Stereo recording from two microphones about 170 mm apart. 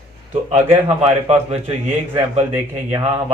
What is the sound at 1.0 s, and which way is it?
Speech, 35° right (ahead or behind).